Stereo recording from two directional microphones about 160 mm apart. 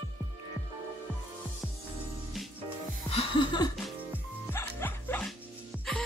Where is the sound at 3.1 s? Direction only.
35° left (ahead or behind).